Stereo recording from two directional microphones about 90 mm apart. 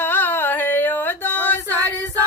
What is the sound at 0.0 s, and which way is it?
Music, 20° left (ahead or behind).